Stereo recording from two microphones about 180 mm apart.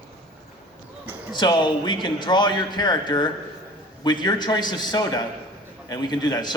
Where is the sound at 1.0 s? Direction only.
10° right (ahead or behind).